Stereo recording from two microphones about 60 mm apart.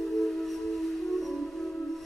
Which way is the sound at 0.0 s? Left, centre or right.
Centre.